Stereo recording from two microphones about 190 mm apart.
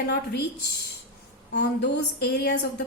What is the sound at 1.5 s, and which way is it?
A woman's voice, 65° left (ahead or behind).